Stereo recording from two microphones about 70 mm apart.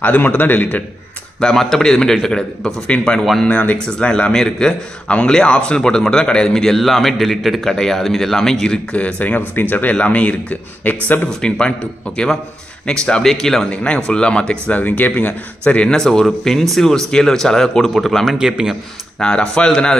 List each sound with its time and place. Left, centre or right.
0.0 s a man's voice: left
1.4 s a man's voice: centre; by 3.7 s left
3.7 s a man's voice: centre
8.9 s a man's voice: left
11.2 s speech: centre
12.8 s speech: centre
14.8 s a man's voice: left
16.0 s a man's voice: centre
19.1 s speech: centre